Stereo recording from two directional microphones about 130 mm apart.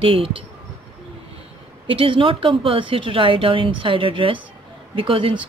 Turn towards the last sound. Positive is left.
turn(degrees=-40)  # may be behind; listen again after turning